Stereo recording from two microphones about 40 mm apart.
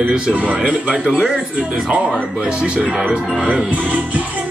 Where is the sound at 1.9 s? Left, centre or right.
Right.